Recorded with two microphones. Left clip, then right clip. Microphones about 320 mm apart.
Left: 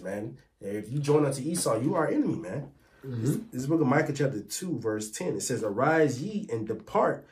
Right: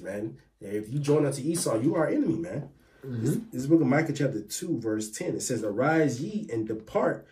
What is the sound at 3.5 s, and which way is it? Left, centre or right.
Speech, centre.